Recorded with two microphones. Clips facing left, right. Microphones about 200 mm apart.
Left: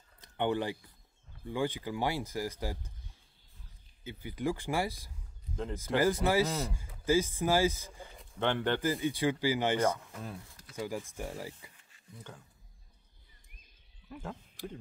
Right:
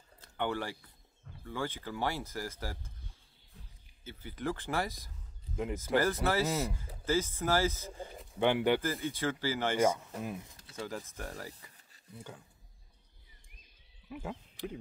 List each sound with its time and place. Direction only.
0.2 s speech: 20° left (ahead or behind)
4.0 s speech: 15° left (ahead or behind)
8.4 s speech: 10° right (ahead or behind)
9.0 s speech: 15° left (ahead or behind)
9.8 s speech: 15° right (ahead or behind)
10.8 s speech: 10° left (ahead or behind)
12.3 s speech: 5° right (ahead or behind)
14.0 s speech: 5° right (ahead or behind)